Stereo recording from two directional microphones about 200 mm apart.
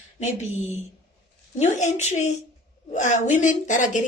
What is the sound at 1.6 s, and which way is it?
A woman's voice, 35° left (ahead or behind).